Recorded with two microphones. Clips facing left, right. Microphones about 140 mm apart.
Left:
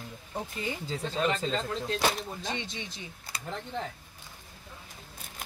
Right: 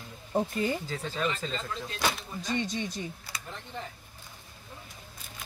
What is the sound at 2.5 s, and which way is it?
Speech, 45° right (ahead or behind).